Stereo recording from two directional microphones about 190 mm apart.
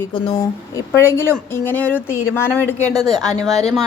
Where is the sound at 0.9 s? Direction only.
15° left (ahead or behind).